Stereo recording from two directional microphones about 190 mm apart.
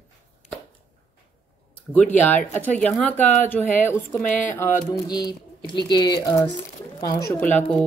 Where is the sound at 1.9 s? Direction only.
10° left (ahead or behind).